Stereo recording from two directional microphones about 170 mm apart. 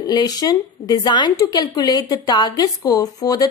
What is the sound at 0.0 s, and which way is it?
A woman's voice, 25° left (ahead or behind).